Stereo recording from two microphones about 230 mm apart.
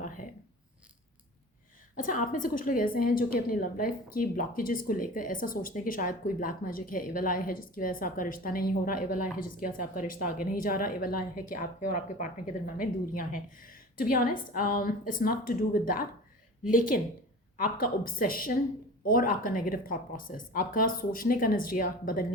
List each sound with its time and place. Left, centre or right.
2.3 s speech: left
17.6 s speech: left